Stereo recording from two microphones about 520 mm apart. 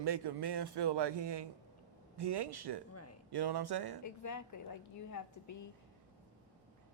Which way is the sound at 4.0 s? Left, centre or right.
Left.